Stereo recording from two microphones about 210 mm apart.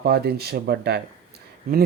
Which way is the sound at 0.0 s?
50° right (ahead or behind).